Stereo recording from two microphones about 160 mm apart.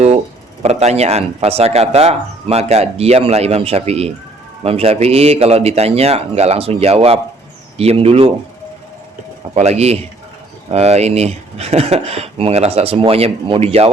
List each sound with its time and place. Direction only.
0.6 s speech: 40° right (ahead or behind)
9.6 s speech: 40° right (ahead or behind)